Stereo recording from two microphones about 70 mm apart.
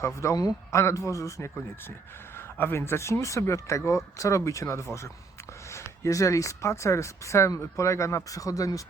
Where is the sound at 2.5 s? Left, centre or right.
Left.